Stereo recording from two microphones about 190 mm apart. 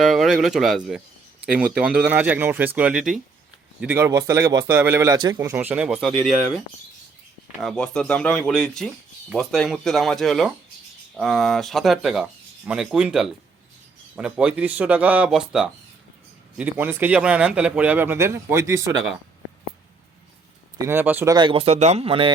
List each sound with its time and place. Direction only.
0.0 s speech: centre (ahead or behind)
7.6 s speech: centre (ahead or behind); by 19.0 s 15° right (ahead or behind)
20.7 s speech: 15° right (ahead or behind)
21.3 s speech: 25° right (ahead or behind)